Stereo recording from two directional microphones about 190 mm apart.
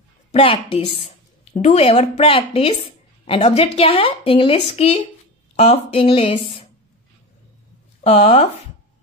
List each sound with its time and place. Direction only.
0.3 s a woman's voice: 30° left (ahead or behind)
8.0 s a woman's voice: 35° left (ahead or behind)